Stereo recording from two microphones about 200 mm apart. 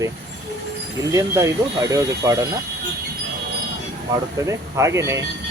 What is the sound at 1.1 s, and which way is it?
Speech, 15° right (ahead or behind).